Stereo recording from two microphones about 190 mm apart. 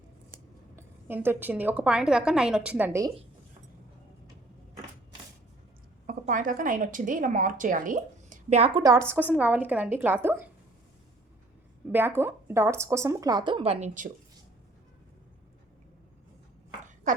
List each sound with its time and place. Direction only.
0.8 s a woman's voice: 10° right (ahead or behind)
6.1 s a woman's voice: 45° right (ahead or behind)
8.8 s a woman's voice: 15° right (ahead or behind)
9.3 s a woman's voice: 5° right (ahead or behind)
11.9 s a woman's voice: 10° right (ahead or behind); by 14.1 s 40° right (ahead or behind)